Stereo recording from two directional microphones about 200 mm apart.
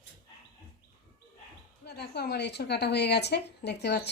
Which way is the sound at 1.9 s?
55° left (ahead or behind).